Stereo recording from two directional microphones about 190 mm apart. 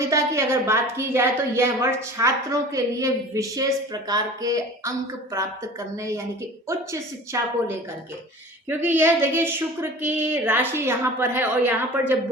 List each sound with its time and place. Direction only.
0.0 s a woman's voice: 15° right (ahead or behind)
7.3 s a woman's voice: 15° right (ahead or behind)
8.7 s a woman's voice: 10° right (ahead or behind)